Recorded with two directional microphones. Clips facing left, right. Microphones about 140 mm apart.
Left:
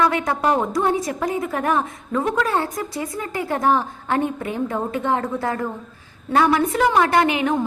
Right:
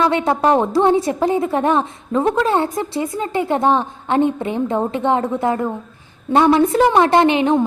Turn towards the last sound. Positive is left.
turn(degrees=-25)  # may be behind; listen again after turning